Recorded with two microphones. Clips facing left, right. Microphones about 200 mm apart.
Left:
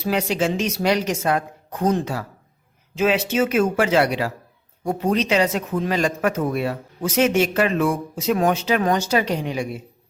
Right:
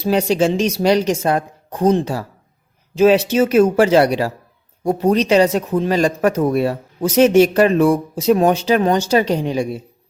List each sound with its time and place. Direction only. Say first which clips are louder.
0.0 s speech: right 6 dB; 30° right (ahead or behind)